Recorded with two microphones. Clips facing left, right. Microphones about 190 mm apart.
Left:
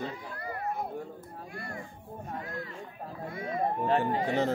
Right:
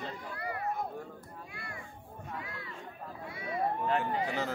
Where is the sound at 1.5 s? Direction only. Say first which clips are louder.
Left 7 dB; 45° left (ahead or behind).